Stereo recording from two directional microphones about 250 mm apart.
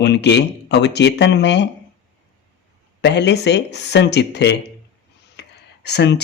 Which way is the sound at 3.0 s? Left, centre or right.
Left.